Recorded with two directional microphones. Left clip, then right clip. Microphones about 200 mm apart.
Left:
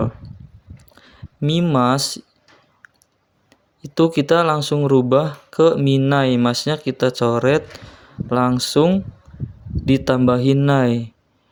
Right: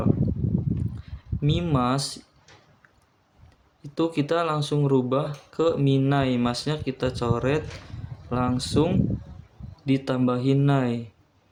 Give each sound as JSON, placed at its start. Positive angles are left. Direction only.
{"t": 1.0, "sound": "speech", "side_deg": 40}
{"t": 2.8, "sound": "a sound", "side_deg": 40}
{"t": 3.5, "sound": "speech", "side_deg": 40}